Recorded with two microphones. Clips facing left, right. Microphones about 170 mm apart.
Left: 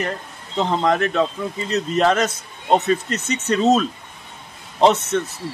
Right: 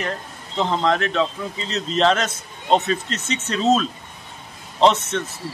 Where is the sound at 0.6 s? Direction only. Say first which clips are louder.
Left 1 dB; 15° left (ahead or behind).